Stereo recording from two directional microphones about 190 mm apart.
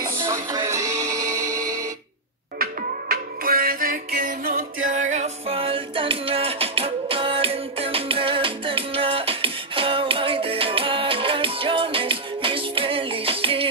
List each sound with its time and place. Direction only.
0.0 s music: 15° right (ahead or behind)
2.6 s music: 50° right (ahead or behind); by 13.7 s 30° right (ahead or behind)